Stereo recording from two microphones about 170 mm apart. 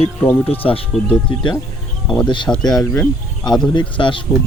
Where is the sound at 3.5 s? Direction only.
25° left (ahead or behind).